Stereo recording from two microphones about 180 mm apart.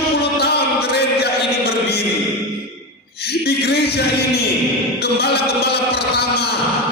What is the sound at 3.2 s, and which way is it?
A man's voice, 65° left (ahead or behind).